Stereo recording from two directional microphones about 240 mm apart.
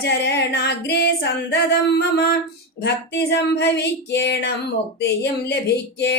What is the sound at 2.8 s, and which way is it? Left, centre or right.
Speech, left.